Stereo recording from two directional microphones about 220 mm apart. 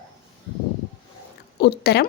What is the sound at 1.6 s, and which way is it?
Speech, 50° left (ahead or behind).